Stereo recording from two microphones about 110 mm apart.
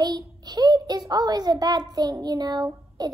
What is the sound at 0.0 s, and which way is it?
A child's voice, 40° right (ahead or behind).